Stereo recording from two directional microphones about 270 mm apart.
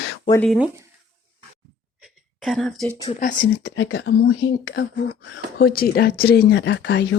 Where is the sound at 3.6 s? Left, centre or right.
Left.